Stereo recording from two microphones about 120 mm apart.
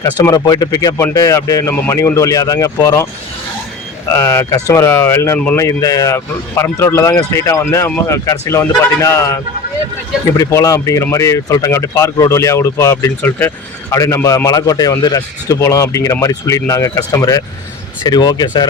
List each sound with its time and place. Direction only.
0.3 s speech: 30° left (ahead or behind)
4.1 s speech: 25° left (ahead or behind)